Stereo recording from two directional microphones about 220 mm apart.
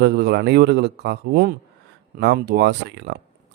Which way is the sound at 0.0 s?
50° right (ahead or behind).